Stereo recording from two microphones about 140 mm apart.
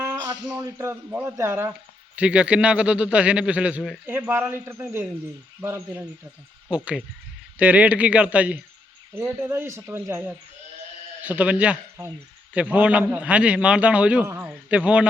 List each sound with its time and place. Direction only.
0.5 s a man's voice: 20° right (ahead or behind)
2.1 s a man's voice: 10° right (ahead or behind)
4.0 s a man's voice: 15° right (ahead or behind)
11.2 s a man's voice: 10° right (ahead or behind)
14.4 s a sound: 5° right (ahead or behind)